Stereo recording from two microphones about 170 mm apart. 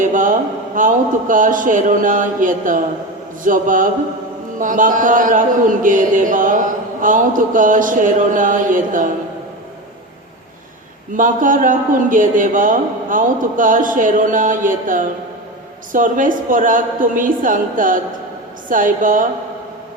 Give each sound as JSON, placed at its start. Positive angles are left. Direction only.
{"t": 0.0, "sound": "a man's voice", "side_deg": -50}
{"t": 11.1, "sound": "a man's voice", "side_deg": -50}